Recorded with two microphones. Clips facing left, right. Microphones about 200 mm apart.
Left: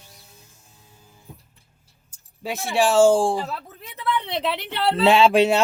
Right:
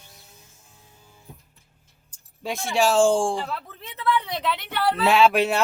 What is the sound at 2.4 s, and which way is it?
Speech, 5° left (ahead or behind).